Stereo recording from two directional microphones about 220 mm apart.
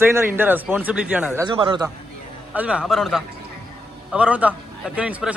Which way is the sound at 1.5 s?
20° right (ahead or behind).